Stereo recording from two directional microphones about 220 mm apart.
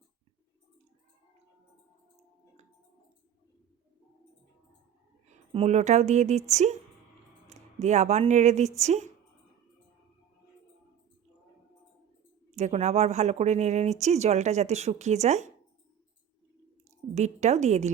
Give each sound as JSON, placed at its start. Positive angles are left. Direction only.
{"t": 5.5, "sound": "speech", "side_deg": -30}
{"t": 12.5, "sound": "speech", "side_deg": -30}
{"t": 17.2, "sound": "speech", "side_deg": -30}